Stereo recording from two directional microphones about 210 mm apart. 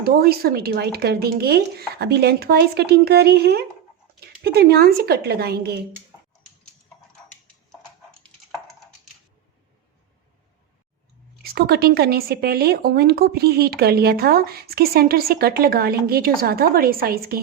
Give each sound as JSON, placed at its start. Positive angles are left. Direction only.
{"t": 0.0, "sound": "a woman's voice", "side_deg": -45}
{"t": 11.4, "sound": "a woman's voice", "side_deg": -45}